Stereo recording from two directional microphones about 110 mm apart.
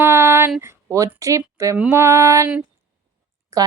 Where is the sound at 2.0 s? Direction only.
25° right (ahead or behind).